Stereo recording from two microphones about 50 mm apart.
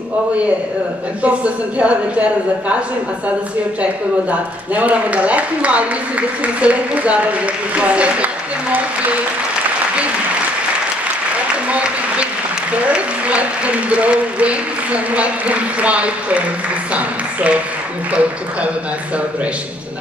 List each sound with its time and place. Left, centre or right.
1.2 s speech: right
3.8 s speech: right
12.8 s speech: right